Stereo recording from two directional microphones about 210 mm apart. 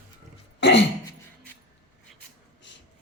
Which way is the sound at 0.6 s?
55° left (ahead or behind).